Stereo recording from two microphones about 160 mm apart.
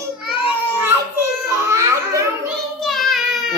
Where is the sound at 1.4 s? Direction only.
20° right (ahead or behind).